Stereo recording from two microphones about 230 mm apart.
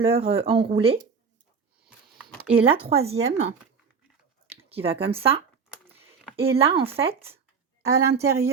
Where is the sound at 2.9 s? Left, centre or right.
Right.